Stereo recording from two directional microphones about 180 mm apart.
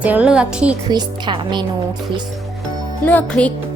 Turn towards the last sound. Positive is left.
turn(degrees=5)  # may be behind; listen again after turning